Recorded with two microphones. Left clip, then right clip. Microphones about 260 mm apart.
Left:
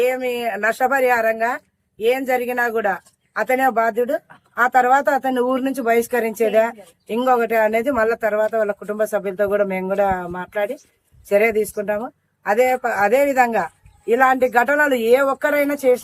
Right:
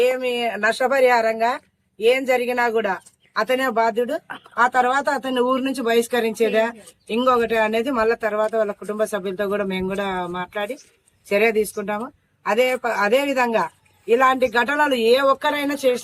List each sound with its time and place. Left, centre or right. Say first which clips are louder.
0.0 s speech: even; centre